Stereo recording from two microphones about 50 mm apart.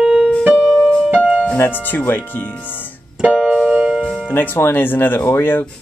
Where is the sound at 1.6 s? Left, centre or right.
Left.